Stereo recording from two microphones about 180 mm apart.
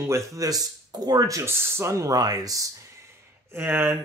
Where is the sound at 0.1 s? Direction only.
20° right (ahead or behind).